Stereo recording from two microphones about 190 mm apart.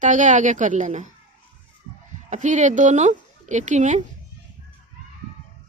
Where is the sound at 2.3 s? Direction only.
40° right (ahead or behind).